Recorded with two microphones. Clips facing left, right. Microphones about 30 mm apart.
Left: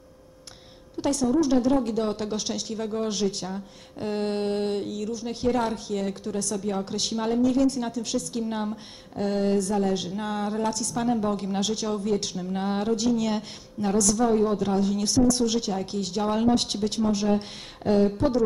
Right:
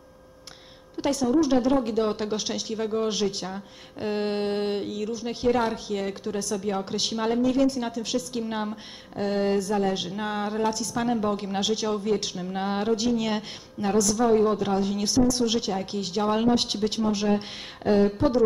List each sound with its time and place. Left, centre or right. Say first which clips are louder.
1.0 s a woman's voice: even; centre